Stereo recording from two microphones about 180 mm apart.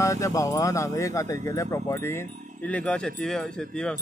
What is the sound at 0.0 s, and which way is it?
Speech, 20° left (ahead or behind).